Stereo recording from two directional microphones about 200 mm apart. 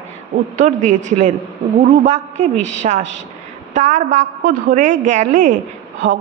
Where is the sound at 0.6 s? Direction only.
40° right (ahead or behind).